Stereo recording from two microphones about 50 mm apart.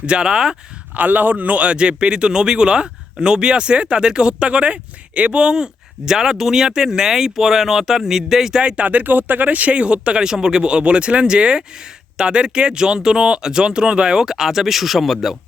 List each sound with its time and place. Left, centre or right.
0.0 s a man's voice: centre
0.9 s a man's voice: right; by 8.6 s centre
8.6 s a man's voice: right; by 15.4 s centre